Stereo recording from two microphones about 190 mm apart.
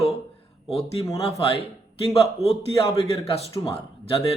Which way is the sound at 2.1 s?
30° left (ahead or behind).